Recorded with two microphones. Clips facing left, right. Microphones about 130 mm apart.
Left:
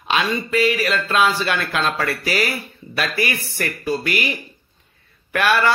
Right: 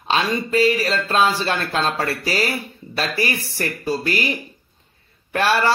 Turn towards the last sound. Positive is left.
turn(degrees=-30)  # may be behind; listen again after turning